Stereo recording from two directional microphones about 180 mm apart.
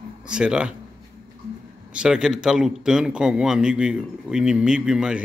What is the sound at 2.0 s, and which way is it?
A man's voice, 5° right (ahead or behind).